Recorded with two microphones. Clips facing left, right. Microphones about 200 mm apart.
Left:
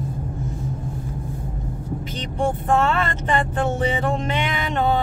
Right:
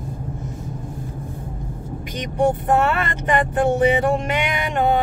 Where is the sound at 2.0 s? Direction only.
15° right (ahead or behind).